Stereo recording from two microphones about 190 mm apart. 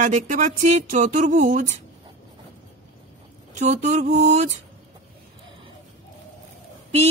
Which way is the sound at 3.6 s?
40° right (ahead or behind).